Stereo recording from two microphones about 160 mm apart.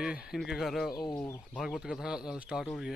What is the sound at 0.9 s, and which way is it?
Speech, 25° left (ahead or behind).